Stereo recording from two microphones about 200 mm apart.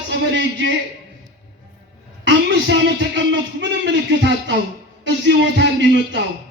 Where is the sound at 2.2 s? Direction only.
60° right (ahead or behind).